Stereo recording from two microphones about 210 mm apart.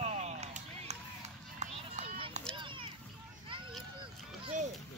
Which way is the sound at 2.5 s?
25° right (ahead or behind).